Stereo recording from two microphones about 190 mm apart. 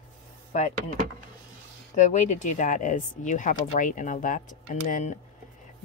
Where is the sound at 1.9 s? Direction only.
40° left (ahead or behind).